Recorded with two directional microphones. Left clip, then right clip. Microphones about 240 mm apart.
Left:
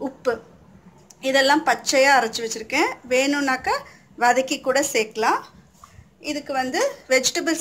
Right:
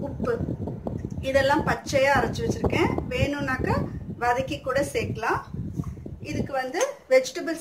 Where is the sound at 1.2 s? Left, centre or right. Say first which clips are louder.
Left 4 dB; left.